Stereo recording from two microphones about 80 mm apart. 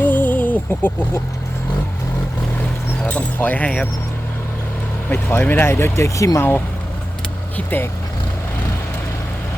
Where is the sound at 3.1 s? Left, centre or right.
Centre.